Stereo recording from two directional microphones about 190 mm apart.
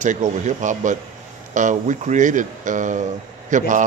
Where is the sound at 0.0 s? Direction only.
40° right (ahead or behind).